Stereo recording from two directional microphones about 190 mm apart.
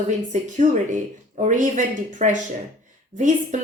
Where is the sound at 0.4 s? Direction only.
40° right (ahead or behind).